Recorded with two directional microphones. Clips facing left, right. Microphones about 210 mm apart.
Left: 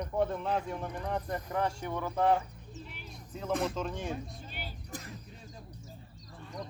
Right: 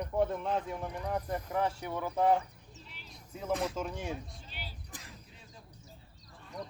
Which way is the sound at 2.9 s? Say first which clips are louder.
Left 6 dB; 55° left (ahead or behind).